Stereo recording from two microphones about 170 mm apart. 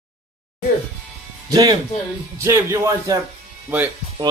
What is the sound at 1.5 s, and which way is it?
Speech, 20° right (ahead or behind).